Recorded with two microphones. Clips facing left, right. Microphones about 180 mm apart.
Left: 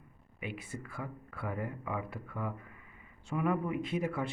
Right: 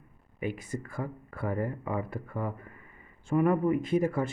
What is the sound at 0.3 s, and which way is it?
Speech, 45° right (ahead or behind).